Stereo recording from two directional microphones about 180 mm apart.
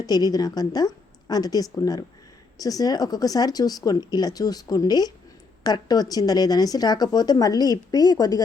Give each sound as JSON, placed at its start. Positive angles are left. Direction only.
{"t": 0.0, "sound": "speech", "side_deg": 20}